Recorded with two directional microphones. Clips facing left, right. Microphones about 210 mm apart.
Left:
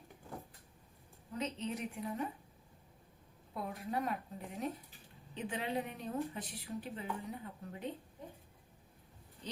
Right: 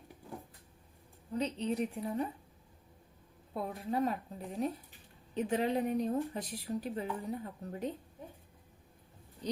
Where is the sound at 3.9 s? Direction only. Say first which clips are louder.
Right 5 dB; 30° right (ahead or behind).